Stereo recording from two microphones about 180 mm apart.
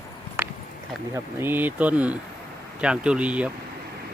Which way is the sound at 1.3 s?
10° right (ahead or behind).